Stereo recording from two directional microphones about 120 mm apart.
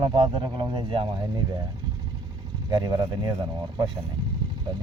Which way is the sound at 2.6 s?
35° right (ahead or behind).